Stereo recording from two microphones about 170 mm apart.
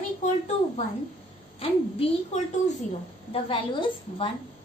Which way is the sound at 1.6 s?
35° left (ahead or behind).